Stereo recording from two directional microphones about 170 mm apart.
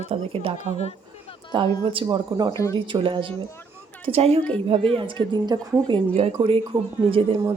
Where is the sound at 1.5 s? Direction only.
25° right (ahead or behind).